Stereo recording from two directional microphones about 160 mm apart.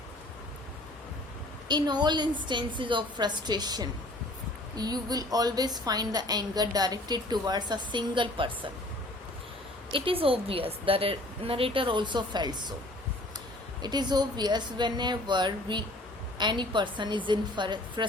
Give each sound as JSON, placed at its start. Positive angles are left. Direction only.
{"t": 1.6, "sound": "a woman's voice", "side_deg": -25}
{"t": 9.9, "sound": "a woman's voice", "side_deg": -35}
{"t": 13.8, "sound": "a woman's voice", "side_deg": -25}